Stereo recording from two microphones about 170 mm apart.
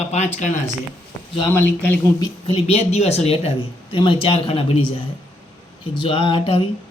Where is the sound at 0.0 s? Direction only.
40° left (ahead or behind).